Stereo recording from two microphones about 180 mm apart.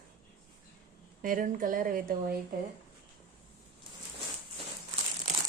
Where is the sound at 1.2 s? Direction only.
50° right (ahead or behind).